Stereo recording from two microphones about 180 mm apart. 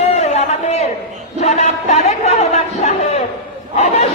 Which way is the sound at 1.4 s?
35° left (ahead or behind).